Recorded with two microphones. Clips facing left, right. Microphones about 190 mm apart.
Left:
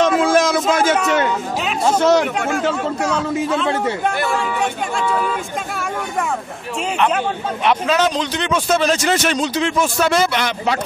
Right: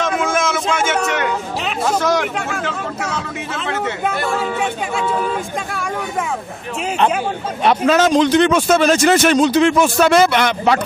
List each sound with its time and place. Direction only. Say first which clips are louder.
0.0 s a sound: left 4 dB; 35° left (ahead or behind)
1.9 s hubbub: left 4 dB; 25° left (ahead or behind)
3.0 s a man's voice: left 6 dB; 30° left (ahead or behind)
7.6 s speech: right 3 dB; 45° right (ahead or behind)